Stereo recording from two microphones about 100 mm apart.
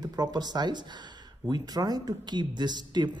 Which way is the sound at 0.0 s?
40° right (ahead or behind).